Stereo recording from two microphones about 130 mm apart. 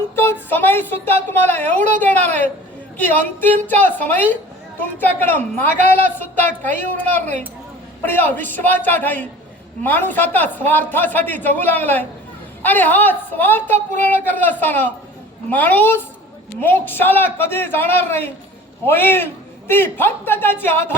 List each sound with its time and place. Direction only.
0.2 s speech: 15° left (ahead or behind)
8.0 s speech: 15° left (ahead or behind)